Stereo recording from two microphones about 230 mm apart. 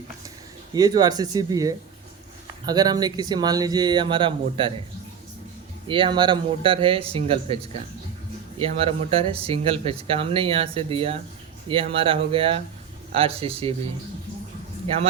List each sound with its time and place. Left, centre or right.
0.7 s speech: centre
5.9 s speech: right
8.8 s speech: right